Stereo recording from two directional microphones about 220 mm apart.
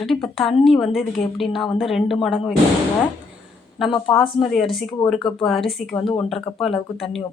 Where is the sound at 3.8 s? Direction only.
Centre (ahead or behind).